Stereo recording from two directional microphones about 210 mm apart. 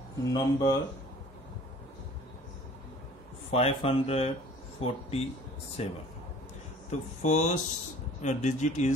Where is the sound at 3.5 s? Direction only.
30° left (ahead or behind).